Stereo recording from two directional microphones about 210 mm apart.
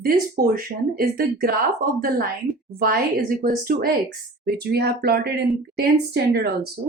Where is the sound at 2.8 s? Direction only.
45° right (ahead or behind).